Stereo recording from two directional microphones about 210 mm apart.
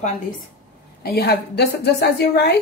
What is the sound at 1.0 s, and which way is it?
A woman's voice, 50° left (ahead or behind).